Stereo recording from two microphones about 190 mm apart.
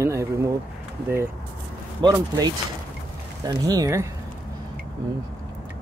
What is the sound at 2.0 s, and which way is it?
Speech, 20° right (ahead or behind).